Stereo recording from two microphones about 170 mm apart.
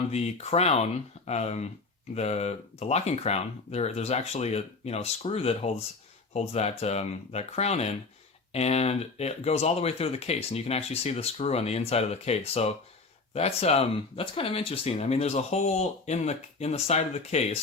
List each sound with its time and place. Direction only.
0.1 s speech: 40° left (ahead or behind)